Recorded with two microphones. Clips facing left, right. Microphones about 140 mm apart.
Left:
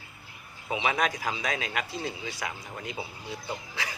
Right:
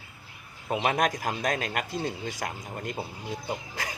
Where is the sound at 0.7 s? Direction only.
50° right (ahead or behind).